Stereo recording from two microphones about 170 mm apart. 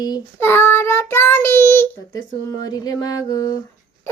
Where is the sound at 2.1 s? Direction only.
20° left (ahead or behind).